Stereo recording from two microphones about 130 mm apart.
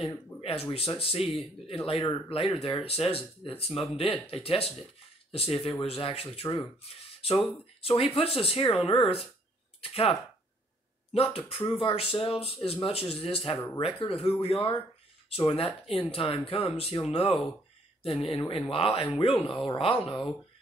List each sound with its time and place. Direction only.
0.4 s speech: 45° left (ahead or behind)
1.2 s speech: centre (ahead or behind)
1.9 s speech: 45° left (ahead or behind)
7.8 s speech: 45° left (ahead or behind)
11.1 s speech: 45° left (ahead or behind)